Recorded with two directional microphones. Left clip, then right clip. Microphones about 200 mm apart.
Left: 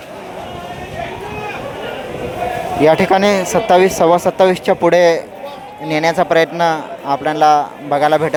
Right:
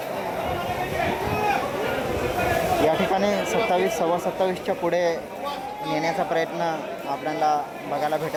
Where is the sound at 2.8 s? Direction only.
30° left (ahead or behind).